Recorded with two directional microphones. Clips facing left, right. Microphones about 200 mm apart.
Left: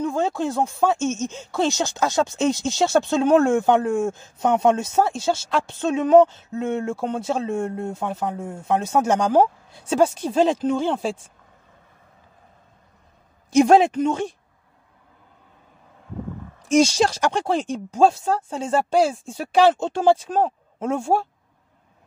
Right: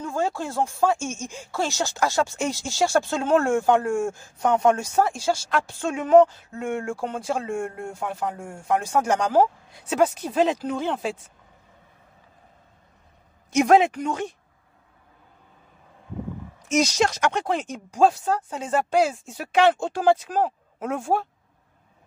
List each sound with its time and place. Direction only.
0.0 s a sound: 20° left (ahead or behind)
0.4 s speech: 20° left (ahead or behind)
13.5 s speech: 30° left (ahead or behind)
16.6 s speech: 30° left (ahead or behind)